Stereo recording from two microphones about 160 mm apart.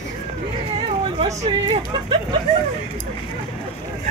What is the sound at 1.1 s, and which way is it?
Speech, 40° right (ahead or behind).